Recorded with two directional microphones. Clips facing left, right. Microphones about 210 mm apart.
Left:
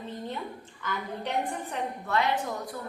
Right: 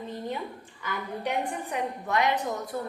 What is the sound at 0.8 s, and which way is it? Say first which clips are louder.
A woman's voice: right 2 dB; 10° right (ahead or behind).